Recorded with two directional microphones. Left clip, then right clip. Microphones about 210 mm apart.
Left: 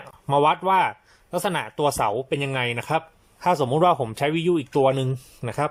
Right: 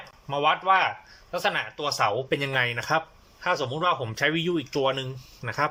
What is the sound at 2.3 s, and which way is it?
Speech, 10° left (ahead or behind).